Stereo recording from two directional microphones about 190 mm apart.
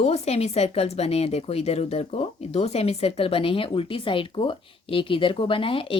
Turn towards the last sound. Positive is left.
turn(degrees=25)  # may be behind; listen again after turning